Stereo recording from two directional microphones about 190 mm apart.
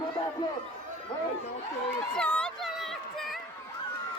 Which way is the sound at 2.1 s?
5° left (ahead or behind).